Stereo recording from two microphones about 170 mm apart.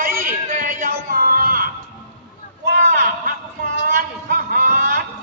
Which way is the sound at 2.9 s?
60° right (ahead or behind).